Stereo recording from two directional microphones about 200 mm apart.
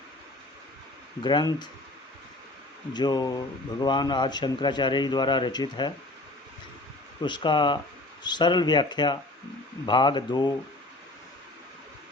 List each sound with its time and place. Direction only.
1.2 s speech: 20° left (ahead or behind)
2.9 s speech: 20° left (ahead or behind)
7.2 s speech: 20° left (ahead or behind)